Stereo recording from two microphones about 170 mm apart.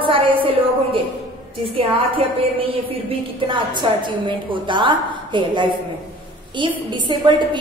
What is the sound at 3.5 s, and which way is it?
A woman's voice, 25° right (ahead or behind).